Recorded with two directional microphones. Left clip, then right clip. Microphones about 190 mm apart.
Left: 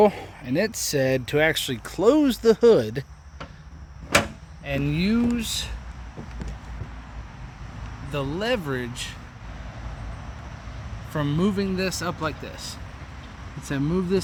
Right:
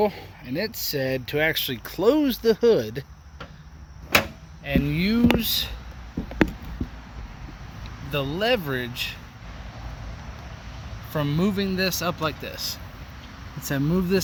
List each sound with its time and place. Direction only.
0.0 s speech: 35° left (ahead or behind); by 3.0 s 20° left (ahead or behind)
4.6 s speech: centre (ahead or behind)
5.4 s speech: 20° right (ahead or behind)
8.1 s speech: 30° right (ahead or behind)
11.1 s speech: 25° right (ahead or behind); by 14.2 s 50° right (ahead or behind)